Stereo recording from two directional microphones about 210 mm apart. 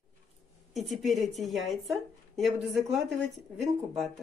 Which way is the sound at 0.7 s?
Centre (ahead or behind).